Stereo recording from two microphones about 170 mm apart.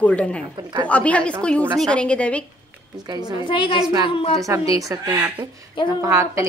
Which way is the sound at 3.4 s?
30° left (ahead or behind).